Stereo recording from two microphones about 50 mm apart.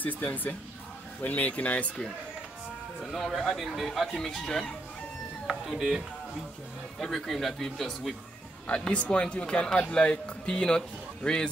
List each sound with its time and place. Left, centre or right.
1.2 s speech: left
3.0 s speech: centre
5.5 s speech: centre
8.6 s speech: left